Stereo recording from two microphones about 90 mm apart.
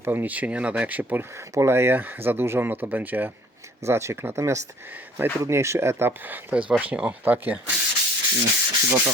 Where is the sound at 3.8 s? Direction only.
30° right (ahead or behind).